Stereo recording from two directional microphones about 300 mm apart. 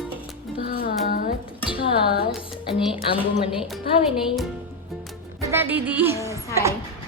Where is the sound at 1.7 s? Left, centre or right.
Centre.